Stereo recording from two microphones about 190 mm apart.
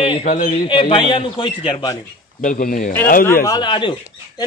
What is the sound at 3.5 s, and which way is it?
Speech, 25° left (ahead or behind).